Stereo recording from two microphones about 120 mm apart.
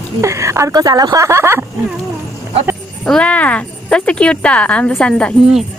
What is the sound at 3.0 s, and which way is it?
Speech, 10° left (ahead or behind).